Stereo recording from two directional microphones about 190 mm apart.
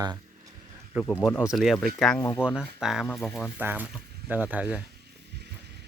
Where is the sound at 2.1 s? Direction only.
15° left (ahead or behind).